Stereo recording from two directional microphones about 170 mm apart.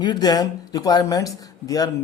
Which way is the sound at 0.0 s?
25° left (ahead or behind).